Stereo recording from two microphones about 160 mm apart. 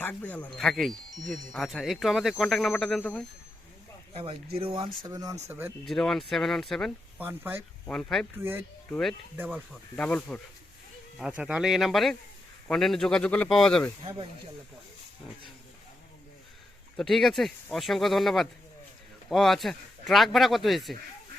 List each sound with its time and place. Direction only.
0.0 s speech: 10° left (ahead or behind)
4.1 s speech: 35° right (ahead or behind); by 5.7 s 15° right (ahead or behind)
5.8 s speech: centre (ahead or behind)
7.2 s speech: 10° right (ahead or behind)
7.9 s speech: 5° left (ahead or behind)
8.4 s speech: 15° right (ahead or behind)
8.9 s speech: centre (ahead or behind)
11.2 s speech: 5° right (ahead or behind)
17.0 s speech: centre (ahead or behind)